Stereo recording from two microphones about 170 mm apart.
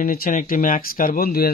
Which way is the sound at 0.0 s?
55° left (ahead or behind).